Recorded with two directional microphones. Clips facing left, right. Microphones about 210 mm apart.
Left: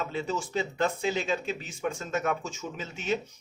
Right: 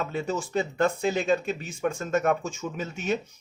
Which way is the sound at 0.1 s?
50° right (ahead or behind).